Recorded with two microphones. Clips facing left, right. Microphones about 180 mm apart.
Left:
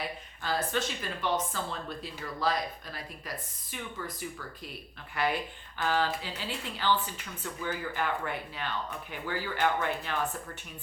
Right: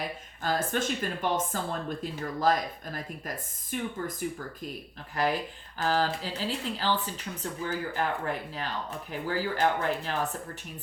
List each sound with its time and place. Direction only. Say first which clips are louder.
0.4 s speech: right 2 dB; 50° right (ahead or behind)
5.1 s speech: right 2 dB; 40° right (ahead or behind)